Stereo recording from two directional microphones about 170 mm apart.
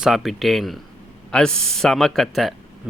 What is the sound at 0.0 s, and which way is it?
Speech, centre (ahead or behind).